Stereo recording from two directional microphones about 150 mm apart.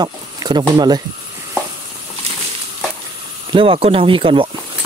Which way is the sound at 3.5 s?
35° right (ahead or behind).